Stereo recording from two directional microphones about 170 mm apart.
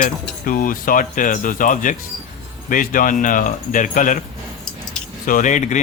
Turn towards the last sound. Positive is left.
turn(degrees=45)  # may be behind; listen again after turning